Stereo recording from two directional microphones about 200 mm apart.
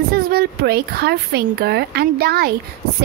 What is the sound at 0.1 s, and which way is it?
Speech, 50° right (ahead or behind).